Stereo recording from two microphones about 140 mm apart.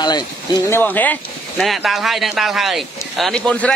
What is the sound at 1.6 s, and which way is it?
Speech, centre (ahead or behind).